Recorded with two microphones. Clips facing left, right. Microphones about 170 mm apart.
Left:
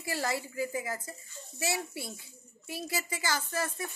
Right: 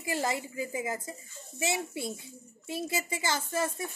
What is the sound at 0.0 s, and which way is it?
A child's voice, 20° right (ahead or behind).